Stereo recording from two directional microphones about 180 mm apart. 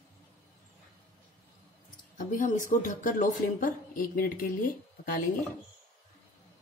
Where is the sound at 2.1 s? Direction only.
45° left (ahead or behind).